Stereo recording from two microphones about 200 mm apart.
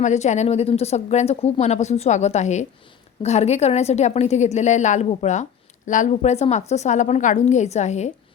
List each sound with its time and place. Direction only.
0.0 s a woman's voice: 35° left (ahead or behind)